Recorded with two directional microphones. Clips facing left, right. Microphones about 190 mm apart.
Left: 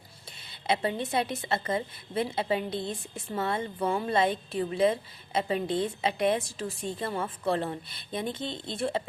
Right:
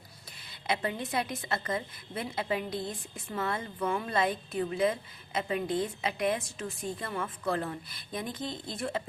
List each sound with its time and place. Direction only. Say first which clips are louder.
0.7 s a woman's voice: left 4 dB; 30° left (ahead or behind)